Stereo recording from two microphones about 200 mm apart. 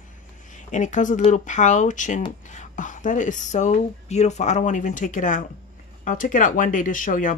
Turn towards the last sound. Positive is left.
turn(degrees=40)  # may be behind; listen again after turning